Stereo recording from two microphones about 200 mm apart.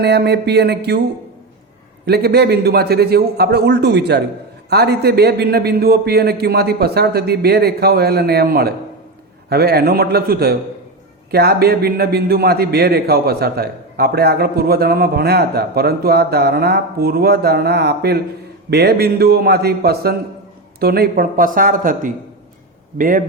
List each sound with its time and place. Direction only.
0.0 s speech: 55° right (ahead or behind)
2.0 s a man's voice: 55° right (ahead or behind)